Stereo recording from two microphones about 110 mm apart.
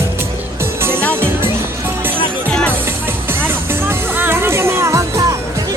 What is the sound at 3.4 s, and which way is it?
Music, 20° right (ahead or behind).